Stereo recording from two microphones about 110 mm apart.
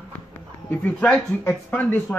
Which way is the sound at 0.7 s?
15° left (ahead or behind).